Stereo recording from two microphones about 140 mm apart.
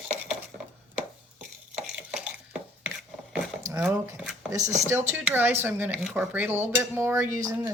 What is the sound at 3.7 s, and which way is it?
Speech, 20° right (ahead or behind).